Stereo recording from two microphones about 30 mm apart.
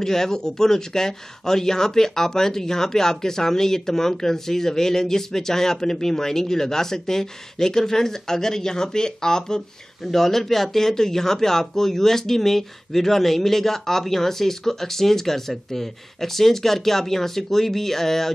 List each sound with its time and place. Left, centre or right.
0.0 s speech: centre
10.0 s speech: centre